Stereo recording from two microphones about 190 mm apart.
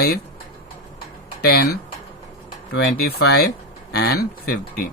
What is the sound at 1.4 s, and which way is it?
A man's voice, 55° left (ahead or behind).